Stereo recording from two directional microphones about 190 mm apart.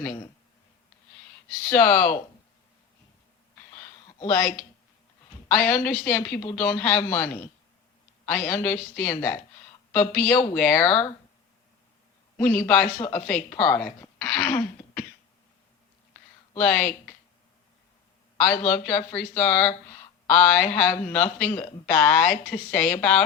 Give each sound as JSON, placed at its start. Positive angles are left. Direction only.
{"t": 0.0, "sound": "speech", "side_deg": 15}
{"t": 1.7, "sound": "speech", "side_deg": 10}
{"t": 4.3, "sound": "speech", "side_deg": 15}
{"t": 12.4, "sound": "speech", "side_deg": 10}
{"t": 16.6, "sound": "speech", "side_deg": 5}
{"t": 18.7, "sound": "speech", "side_deg": 10}